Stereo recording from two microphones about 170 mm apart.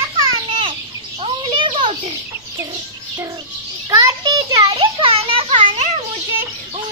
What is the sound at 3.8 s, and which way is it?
Child singing, 20° right (ahead or behind).